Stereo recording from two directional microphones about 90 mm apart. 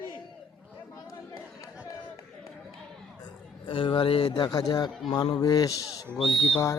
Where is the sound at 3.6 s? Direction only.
60° left (ahead or behind); by 4.2 s 75° left (ahead or behind).